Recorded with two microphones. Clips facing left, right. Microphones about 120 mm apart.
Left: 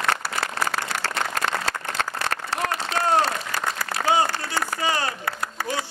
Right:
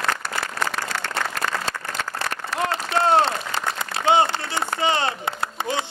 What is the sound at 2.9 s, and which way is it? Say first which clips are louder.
Applause: right 3 dB; 25° right (ahead or behind).